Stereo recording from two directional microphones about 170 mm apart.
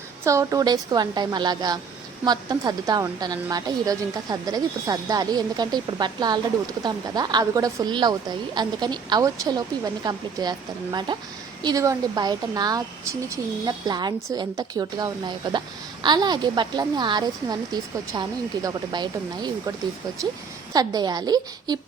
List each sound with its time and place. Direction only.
0.3 s a woman's voice: 20° right (ahead or behind)
11.6 s a woman's voice: 20° right (ahead or behind)
20.7 s a woman's voice: 25° right (ahead or behind)